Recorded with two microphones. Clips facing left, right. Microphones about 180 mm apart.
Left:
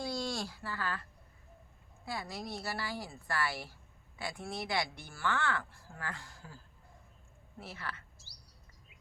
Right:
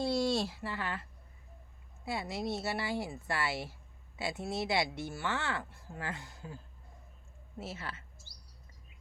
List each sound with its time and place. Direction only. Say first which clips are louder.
0.0 s a woman's voice: right 6 dB; 25° right (ahead or behind)
2.0 s speech: right 5 dB; 25° right (ahead or behind)
7.6 s speech: right 2 dB; 25° right (ahead or behind)